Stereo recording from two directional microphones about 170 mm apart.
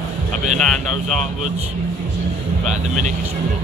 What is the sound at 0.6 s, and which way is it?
Speech, centre (ahead or behind).